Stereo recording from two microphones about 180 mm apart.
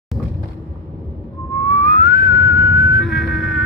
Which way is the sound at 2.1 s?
70° left (ahead or behind).